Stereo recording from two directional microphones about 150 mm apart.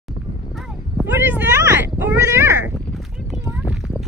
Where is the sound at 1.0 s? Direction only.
15° right (ahead or behind).